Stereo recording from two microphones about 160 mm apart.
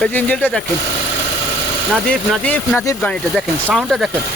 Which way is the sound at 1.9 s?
10° left (ahead or behind).